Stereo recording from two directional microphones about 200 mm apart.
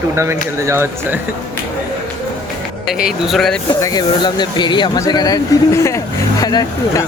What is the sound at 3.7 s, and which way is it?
Speech, 20° left (ahead or behind).